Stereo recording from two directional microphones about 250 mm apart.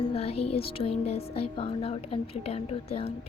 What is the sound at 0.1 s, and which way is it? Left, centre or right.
Speech, left.